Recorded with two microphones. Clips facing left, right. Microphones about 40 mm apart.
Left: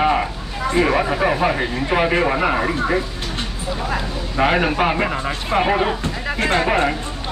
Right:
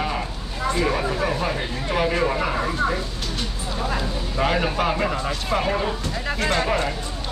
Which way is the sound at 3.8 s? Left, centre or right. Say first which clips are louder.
Even; centre.